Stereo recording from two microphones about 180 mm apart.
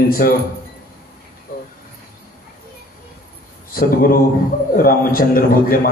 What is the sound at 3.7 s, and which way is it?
A man's voice, 55° left (ahead or behind).